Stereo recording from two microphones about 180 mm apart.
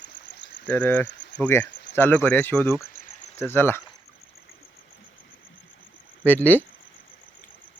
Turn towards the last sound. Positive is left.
turn(degrees=10)  # may be behind; listen again after turning